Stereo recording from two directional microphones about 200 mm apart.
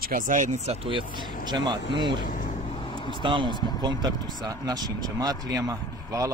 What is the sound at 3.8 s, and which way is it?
Speech, 20° right (ahead or behind).